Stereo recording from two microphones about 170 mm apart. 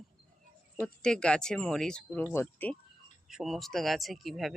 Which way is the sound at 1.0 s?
5° left (ahead or behind).